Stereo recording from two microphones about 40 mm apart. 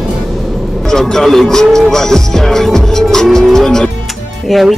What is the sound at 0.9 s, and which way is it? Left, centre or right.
Music, centre.